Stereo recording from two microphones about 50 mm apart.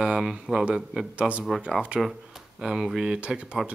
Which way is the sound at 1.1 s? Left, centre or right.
Right.